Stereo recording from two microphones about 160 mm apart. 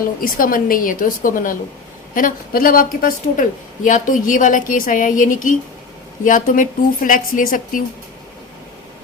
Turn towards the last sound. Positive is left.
turn(degrees=60)  # may be behind; listen again after turning